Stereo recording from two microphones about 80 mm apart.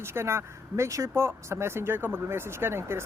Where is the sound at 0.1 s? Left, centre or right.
Right.